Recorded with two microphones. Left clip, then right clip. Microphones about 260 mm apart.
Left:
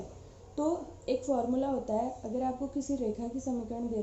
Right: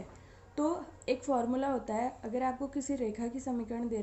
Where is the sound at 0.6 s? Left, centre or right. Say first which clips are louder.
Left 1 dB; right.